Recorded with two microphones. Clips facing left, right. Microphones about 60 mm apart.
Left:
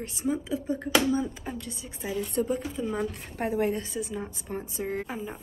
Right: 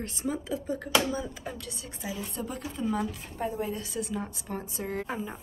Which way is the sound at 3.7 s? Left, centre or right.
Left.